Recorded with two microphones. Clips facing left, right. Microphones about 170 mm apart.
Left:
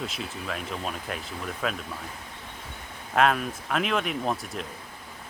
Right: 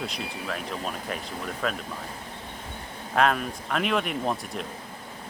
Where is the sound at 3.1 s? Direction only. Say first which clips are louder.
Even; centre (ahead or behind).